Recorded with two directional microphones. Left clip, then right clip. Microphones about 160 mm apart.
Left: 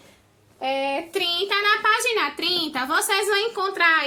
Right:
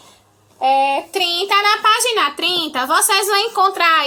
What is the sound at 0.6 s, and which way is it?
A child's voice, 5° left (ahead or behind).